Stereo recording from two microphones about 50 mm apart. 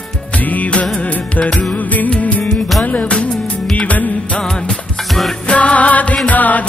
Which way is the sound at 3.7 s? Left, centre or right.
Left.